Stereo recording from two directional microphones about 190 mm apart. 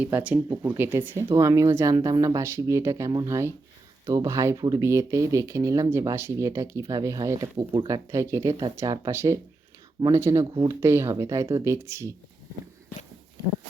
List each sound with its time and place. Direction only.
0.0 s speech: 5° right (ahead or behind)